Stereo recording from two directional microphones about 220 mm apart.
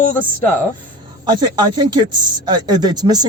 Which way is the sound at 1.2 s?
20° right (ahead or behind).